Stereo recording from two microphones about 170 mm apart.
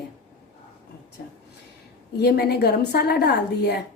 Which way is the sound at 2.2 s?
70° left (ahead or behind).